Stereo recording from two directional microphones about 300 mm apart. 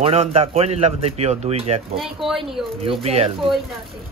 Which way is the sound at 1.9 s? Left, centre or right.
Centre.